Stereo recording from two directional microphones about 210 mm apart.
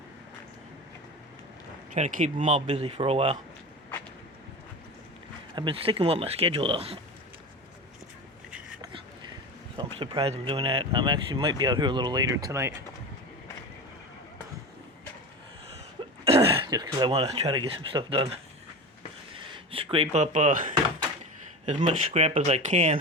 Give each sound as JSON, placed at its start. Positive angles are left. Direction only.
{"t": 1.9, "sound": "speech", "side_deg": -35}
{"t": 5.5, "sound": "speech", "side_deg": -25}
{"t": 9.7, "sound": "speech", "side_deg": -25}
{"t": 16.2, "sound": "speech", "side_deg": -25}
{"t": 19.3, "sound": "a sound", "side_deg": -25}
{"t": 21.8, "sound": "speech", "side_deg": -30}